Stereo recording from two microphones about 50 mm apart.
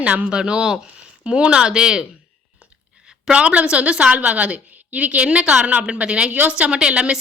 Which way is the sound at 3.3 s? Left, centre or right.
Right.